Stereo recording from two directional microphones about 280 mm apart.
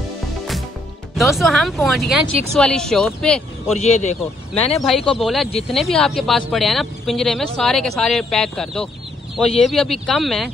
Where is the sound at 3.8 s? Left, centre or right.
Left.